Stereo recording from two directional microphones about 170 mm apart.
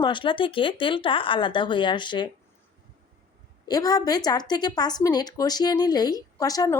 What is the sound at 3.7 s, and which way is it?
Speech, 20° left (ahead or behind).